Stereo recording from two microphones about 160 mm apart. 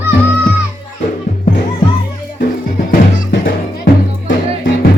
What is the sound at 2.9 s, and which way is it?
Music, 70° left (ahead or behind).